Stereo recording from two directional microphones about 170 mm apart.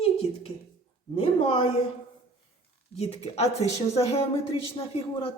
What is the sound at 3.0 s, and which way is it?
A woman's voice, 35° left (ahead or behind).